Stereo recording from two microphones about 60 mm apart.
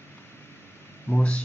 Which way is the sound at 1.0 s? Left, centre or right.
Left.